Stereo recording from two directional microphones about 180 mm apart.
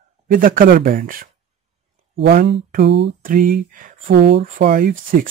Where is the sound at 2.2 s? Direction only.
65° right (ahead or behind).